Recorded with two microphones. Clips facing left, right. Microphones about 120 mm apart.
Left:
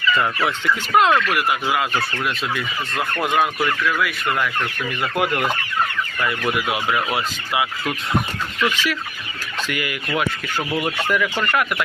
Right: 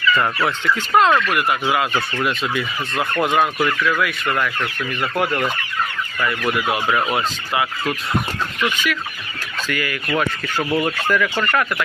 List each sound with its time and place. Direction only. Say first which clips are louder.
0.9 s fowl: right 1 dB; 5° left (ahead or behind)
1.3 s speech: right 1 dB; 5° left (ahead or behind)
5.1 s fowl: even; 10° left (ahead or behind)
6.4 s fowl: right 3 dB; 15° left (ahead or behind)
8.7 s chicken: even; 30° left (ahead or behind)
9.6 s fowl: right 3 dB; 15° left (ahead or behind)
11.1 s fowl: right 1 dB; 15° left (ahead or behind)